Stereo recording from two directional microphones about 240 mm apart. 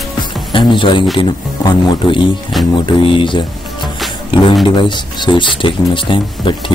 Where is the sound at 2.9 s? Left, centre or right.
Left.